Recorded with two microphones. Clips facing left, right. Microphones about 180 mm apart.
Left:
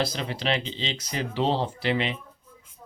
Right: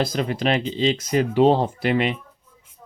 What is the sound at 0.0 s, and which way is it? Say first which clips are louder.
Speech: right 6 dB; 50° right (ahead or behind).